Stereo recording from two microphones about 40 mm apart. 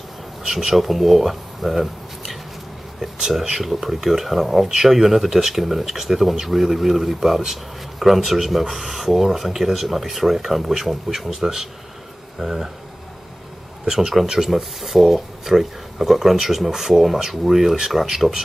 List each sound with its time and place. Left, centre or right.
0.5 s speech: centre
13.8 s speech: centre